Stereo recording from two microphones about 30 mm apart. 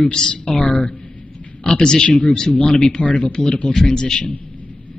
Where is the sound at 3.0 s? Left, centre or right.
Left.